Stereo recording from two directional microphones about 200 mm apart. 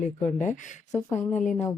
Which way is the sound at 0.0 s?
35° left (ahead or behind).